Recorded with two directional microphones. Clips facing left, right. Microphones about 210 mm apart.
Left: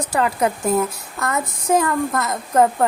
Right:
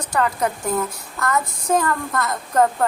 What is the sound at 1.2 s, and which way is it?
A woman's voice, 20° left (ahead or behind).